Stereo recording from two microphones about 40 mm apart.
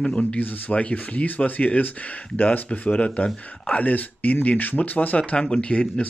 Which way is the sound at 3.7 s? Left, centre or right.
Left.